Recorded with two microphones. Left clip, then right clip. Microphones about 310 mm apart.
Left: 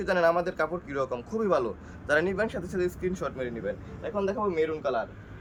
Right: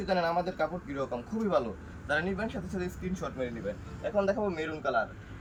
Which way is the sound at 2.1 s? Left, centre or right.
Centre.